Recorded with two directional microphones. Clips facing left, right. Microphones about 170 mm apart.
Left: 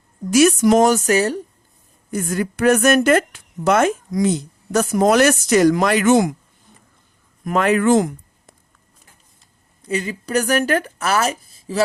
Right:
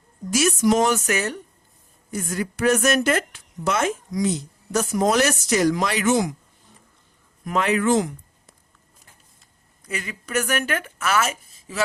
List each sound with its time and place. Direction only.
0.3 s a woman's voice: 60° left (ahead or behind)
0.9 s speech: 35° left (ahead or behind)
2.0 s a woman's voice: 55° left (ahead or behind)
7.4 s speech: 50° left (ahead or behind)
9.8 s speech: 30° left (ahead or behind)